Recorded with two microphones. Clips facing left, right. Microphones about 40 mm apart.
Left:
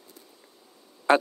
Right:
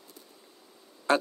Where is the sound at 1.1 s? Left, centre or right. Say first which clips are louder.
Left 4 dB; left.